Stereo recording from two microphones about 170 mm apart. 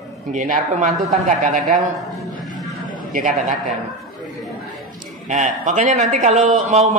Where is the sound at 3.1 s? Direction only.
50° right (ahead or behind).